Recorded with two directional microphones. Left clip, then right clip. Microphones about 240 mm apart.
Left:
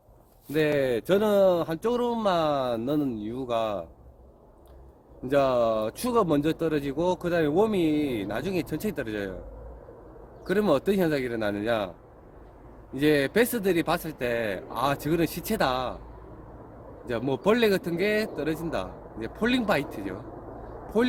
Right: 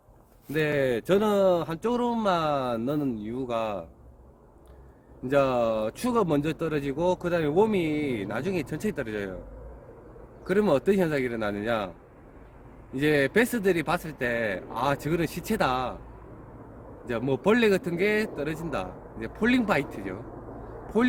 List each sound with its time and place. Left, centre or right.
0.4 s a man's voice: centre
5.3 s a man's voice: centre
10.4 s a man's voice: centre
12.9 s a man's voice: centre
17.1 s a man's voice: centre
20.3 s a sound: left